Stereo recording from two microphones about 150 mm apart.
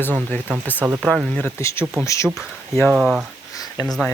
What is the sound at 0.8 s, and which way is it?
Speech, 15° right (ahead or behind).